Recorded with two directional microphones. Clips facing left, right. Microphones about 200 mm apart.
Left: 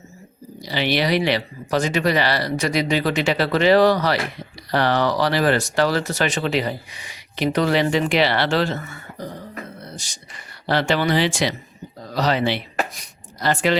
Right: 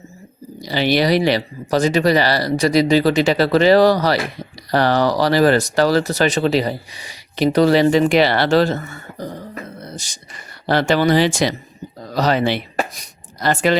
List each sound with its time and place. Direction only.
0.6 s speech: 40° right (ahead or behind)